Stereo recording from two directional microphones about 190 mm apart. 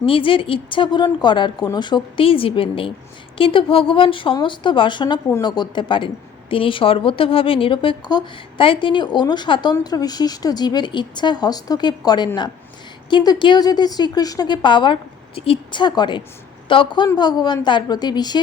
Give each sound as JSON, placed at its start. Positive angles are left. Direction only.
{"t": 0.0, "sound": "speech", "side_deg": 25}